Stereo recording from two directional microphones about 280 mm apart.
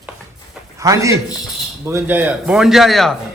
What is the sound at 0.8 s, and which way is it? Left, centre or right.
A man's voice, centre.